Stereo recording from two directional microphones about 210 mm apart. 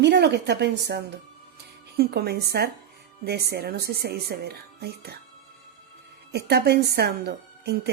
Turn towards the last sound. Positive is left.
turn(degrees=-50)  # may be behind; listen again after turning